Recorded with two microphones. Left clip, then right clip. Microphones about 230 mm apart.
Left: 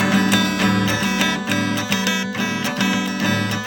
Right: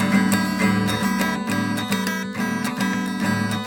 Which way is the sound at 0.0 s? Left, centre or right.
Left.